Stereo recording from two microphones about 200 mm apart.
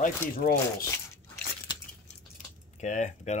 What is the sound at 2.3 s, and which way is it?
Keys jangling, 35° left (ahead or behind).